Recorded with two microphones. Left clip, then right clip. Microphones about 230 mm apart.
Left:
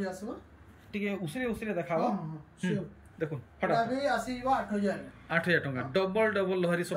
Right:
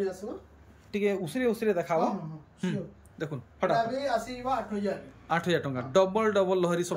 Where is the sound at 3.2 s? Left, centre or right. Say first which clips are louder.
Right 2 dB; centre.